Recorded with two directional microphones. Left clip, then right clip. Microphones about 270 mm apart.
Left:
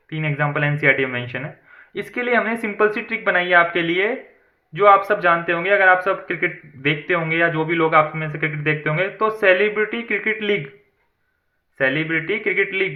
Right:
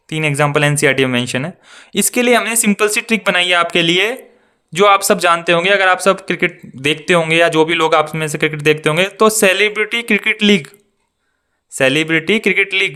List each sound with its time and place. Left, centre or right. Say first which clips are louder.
0.1 s speech: right 8 dB; right
11.8 s speech: right 6 dB; right